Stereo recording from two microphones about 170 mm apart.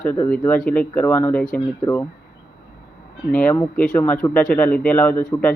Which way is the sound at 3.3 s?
10° left (ahead or behind).